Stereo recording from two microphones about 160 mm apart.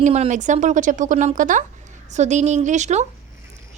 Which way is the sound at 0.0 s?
45° right (ahead or behind).